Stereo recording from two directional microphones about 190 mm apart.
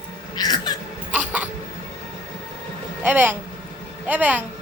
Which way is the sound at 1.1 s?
10° right (ahead or behind).